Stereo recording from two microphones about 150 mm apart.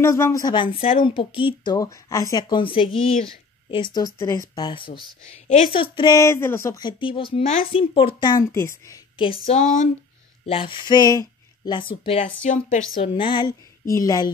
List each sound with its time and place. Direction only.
0.0 s a woman's voice: 20° left (ahead or behind)
6.8 s speech: 30° left (ahead or behind)
8.5 s a woman's voice: 20° left (ahead or behind)
9.2 s speech: 35° left (ahead or behind)
9.6 s a woman's voice: 60° left (ahead or behind)
10.4 s speech: 35° left (ahead or behind)
12.0 s speech: 35° left (ahead or behind)
12.4 s a woman's voice: 60° left (ahead or behind)
13.0 s speech: 35° left (ahead or behind)
13.9 s a woman's voice: 20° left (ahead or behind)